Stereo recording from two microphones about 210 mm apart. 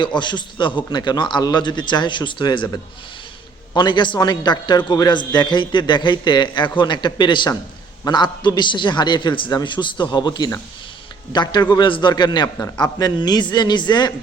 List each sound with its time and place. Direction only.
0.0 s a man's voice: 20° left (ahead or behind)
3.8 s a man's voice: 20° left (ahead or behind)